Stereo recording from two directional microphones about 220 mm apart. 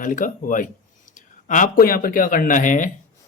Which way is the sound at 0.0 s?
35° left (ahead or behind).